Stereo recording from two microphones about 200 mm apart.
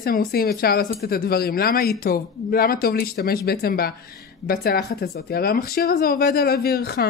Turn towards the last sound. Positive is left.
turn(degrees=55)  # may be behind; listen again after turning